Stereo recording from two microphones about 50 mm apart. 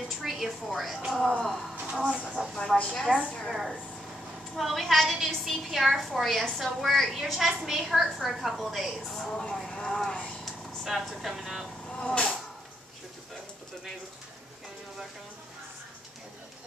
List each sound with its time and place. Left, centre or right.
0.1 s a sound: centre
2.0 s speech: centre
2.5 s a woman's voice: centre
3.1 s a woman's voice: right
3.4 s a woman's voice: centre
6.4 s a woman's voice: centre
9.3 s a woman's voice: centre
12.0 s speech: centre